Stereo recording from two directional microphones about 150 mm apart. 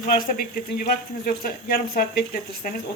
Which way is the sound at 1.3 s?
75° left (ahead or behind).